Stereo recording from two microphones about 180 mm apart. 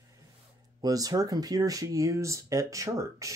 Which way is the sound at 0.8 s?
20° right (ahead or behind).